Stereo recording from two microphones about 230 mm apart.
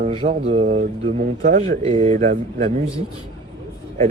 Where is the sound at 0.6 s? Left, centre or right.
Right.